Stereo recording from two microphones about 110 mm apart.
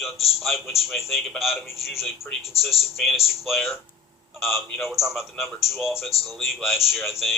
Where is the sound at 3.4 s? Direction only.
Centre (ahead or behind).